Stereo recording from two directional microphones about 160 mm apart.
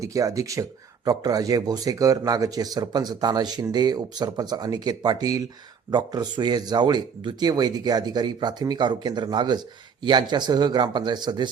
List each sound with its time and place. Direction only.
0.0 s speech: 20° right (ahead or behind)